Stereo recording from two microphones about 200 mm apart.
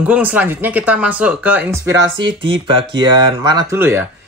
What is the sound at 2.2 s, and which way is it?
Speech, 25° right (ahead or behind).